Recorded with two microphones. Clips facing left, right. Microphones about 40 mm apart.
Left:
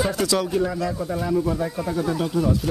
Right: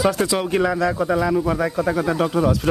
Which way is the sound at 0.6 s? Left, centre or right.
Right.